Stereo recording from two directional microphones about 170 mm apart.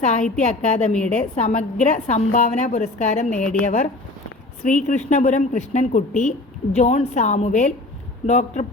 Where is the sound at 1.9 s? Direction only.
45° left (ahead or behind).